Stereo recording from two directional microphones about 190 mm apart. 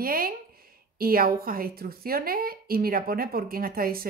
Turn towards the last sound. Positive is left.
turn(degrees=-50)  # may be behind; listen again after turning